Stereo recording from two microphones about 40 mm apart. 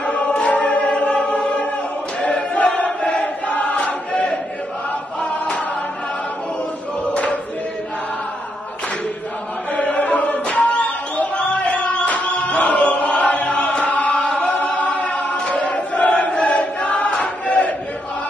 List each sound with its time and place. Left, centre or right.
0.0 s choir: left
9.8 s choir: left
17.2 s a sound: left